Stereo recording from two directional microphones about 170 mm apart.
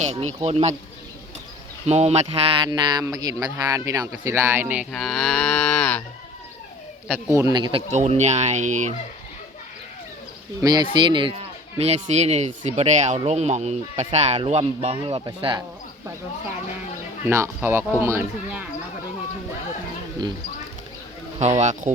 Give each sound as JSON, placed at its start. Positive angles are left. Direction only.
{"t": 0.0, "sound": "speech", "side_deg": -40}
{"t": 1.9, "sound": "speech", "side_deg": -40}
{"t": 4.9, "sound": "moo", "side_deg": 5}
{"t": 7.1, "sound": "speech", "side_deg": -15}
{"t": 7.9, "sound": "speech", "side_deg": -40}
{"t": 10.6, "sound": "speech", "side_deg": -25}
{"t": 17.2, "sound": "speech", "side_deg": -15}
{"t": 21.3, "sound": "speech", "side_deg": -40}